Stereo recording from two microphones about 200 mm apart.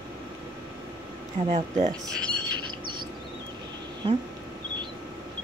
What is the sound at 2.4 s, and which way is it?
Bird, 20° right (ahead or behind).